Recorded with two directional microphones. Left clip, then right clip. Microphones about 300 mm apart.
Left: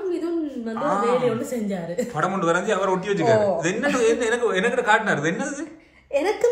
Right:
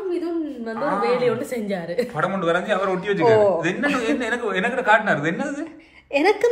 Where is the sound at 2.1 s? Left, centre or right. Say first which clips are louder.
Left 1 dB; centre.